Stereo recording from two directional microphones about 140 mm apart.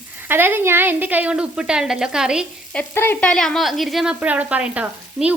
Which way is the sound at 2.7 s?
15° left (ahead or behind).